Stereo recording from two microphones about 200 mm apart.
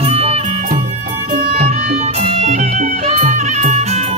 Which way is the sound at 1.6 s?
30° right (ahead or behind).